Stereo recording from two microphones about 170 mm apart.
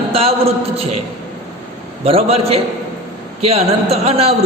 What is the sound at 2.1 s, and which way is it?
A man's voice, 35° right (ahead or behind).